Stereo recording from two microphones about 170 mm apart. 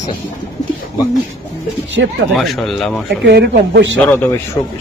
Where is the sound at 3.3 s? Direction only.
75° right (ahead or behind).